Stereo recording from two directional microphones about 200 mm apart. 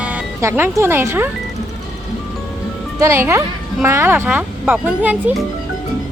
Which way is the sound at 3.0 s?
10° right (ahead or behind).